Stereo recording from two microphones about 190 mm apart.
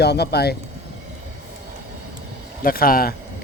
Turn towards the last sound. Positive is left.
turn(degrees=50)  # may be behind; listen again after turning